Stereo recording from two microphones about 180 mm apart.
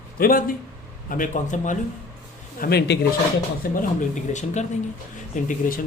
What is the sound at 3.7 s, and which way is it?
Speech, 45° left (ahead or behind).